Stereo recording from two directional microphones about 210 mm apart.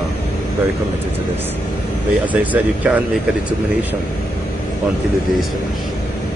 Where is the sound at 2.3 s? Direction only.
5° right (ahead or behind).